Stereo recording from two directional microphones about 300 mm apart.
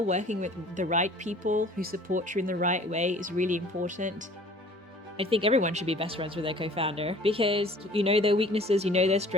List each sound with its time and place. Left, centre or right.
0.1 s speech: right
5.1 s speech: centre